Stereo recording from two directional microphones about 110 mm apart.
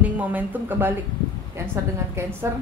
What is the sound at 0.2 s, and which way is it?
Speech, 15° right (ahead or behind).